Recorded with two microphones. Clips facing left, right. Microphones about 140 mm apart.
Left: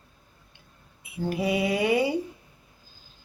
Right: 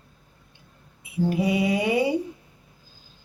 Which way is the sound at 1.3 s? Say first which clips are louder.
Right 2 dB; 20° right (ahead or behind).